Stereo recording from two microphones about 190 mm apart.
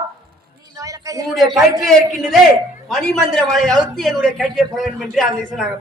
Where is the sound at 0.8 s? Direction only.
15° right (ahead or behind).